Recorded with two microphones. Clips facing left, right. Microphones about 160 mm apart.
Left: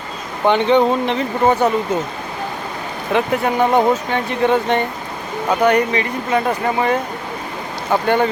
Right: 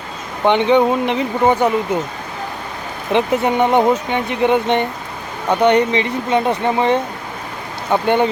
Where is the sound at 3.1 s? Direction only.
25° right (ahead or behind).